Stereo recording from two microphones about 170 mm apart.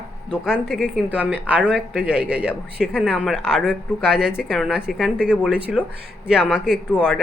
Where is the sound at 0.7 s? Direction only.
5° right (ahead or behind).